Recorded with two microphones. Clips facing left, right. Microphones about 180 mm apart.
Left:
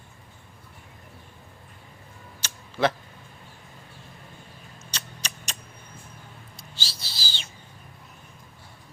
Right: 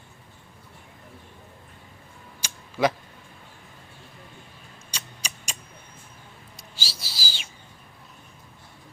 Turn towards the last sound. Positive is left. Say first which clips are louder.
# right 1 dB
turn(degrees=-10)  # may be behind; listen again after turning